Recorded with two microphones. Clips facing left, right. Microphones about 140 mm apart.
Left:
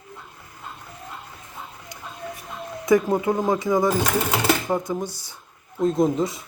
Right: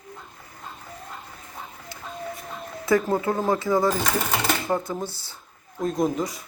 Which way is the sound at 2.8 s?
15° left (ahead or behind).